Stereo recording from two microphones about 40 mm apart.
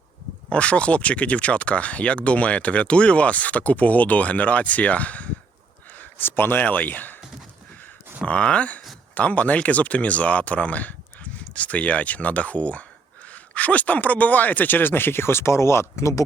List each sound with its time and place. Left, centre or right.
0.5 s speech: left
6.0 s a sound: left
6.6 s speech: left
8.2 s speech: left